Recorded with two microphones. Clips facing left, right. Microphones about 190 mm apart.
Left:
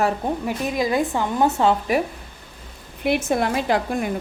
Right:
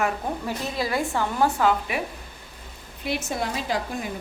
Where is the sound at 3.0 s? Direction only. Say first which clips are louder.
Left 7 dB; 55° left (ahead or behind).